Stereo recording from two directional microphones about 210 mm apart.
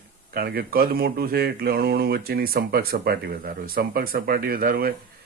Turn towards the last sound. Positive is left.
turn(degrees=-45)  # may be behind; listen again after turning